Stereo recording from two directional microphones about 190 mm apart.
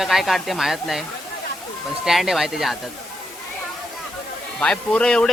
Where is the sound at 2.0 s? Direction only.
Centre (ahead or behind).